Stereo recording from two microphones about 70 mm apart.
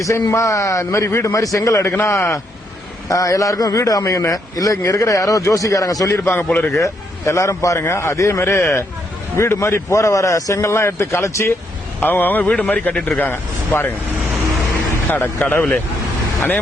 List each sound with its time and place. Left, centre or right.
0.0 s a man's voice: left
1.9 s a man's voice: left
3.1 s a man's voice: left
6.1 s a man's voice: left
6.8 s a man's voice: left
12.0 s speech: left
12.5 s speech: centre
13.2 s speech: left
15.1 s speech: left